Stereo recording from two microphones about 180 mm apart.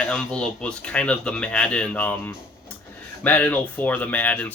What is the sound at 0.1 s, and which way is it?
Speech, 5° left (ahead or behind).